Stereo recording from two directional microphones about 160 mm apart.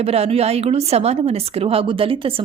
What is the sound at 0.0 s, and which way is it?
A woman's voice, 40° right (ahead or behind).